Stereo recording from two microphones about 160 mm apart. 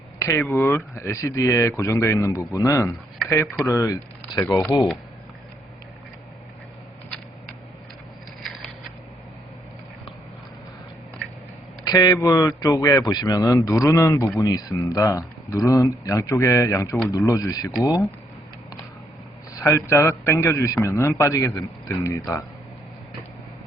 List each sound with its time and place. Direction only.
0.2 s a man's voice: 20° left (ahead or behind)
8.4 s a sound: centre (ahead or behind)
11.9 s a man's voice: 25° left (ahead or behind)
19.5 s a man's voice: 15° left (ahead or behind)